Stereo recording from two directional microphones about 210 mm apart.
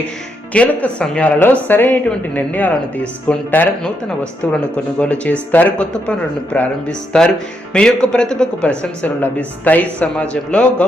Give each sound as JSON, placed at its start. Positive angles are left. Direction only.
{"t": 0.5, "sound": "a woman's voice", "side_deg": 5}